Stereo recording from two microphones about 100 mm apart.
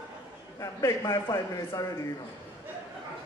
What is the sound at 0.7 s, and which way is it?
Speech, 30° left (ahead or behind).